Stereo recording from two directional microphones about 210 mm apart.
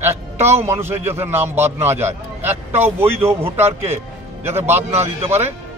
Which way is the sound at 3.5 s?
10° right (ahead or behind).